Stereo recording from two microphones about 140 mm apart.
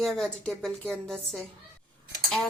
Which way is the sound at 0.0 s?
5° left (ahead or behind).